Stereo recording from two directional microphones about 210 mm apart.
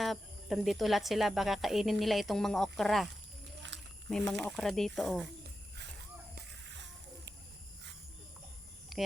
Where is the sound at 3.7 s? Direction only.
60° right (ahead or behind).